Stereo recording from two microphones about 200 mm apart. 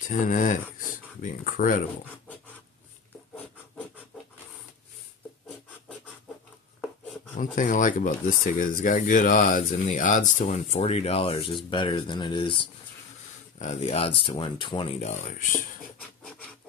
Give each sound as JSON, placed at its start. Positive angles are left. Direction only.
{"t": 0.1, "sound": "speech", "side_deg": 40}
{"t": 7.3, "sound": "speech", "side_deg": 40}